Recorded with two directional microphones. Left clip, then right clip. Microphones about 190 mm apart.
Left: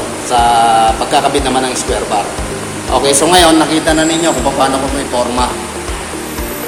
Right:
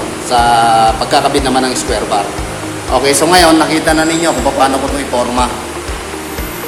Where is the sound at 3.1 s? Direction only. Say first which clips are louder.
Even; 10° right (ahead or behind).